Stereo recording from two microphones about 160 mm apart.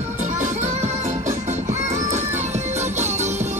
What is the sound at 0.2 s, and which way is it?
Music, 50° right (ahead or behind).